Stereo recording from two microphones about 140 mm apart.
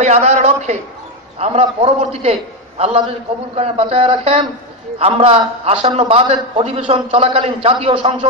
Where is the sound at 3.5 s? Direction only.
45° right (ahead or behind).